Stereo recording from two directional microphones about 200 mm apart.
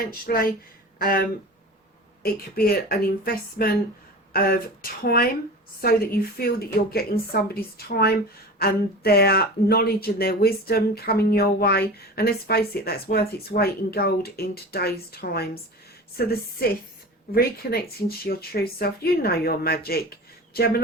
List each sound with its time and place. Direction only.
0.0 s speech: 45° left (ahead or behind)
2.2 s speech: 50° left (ahead or behind)